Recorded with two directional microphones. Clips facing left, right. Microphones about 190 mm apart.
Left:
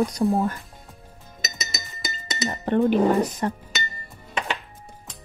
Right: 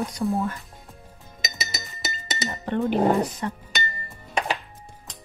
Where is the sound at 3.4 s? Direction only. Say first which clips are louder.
Left 4 dB; 45° left (ahead or behind).